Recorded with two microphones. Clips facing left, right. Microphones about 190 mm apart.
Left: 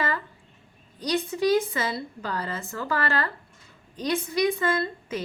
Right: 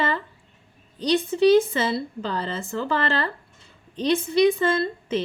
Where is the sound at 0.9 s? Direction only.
30° right (ahead or behind).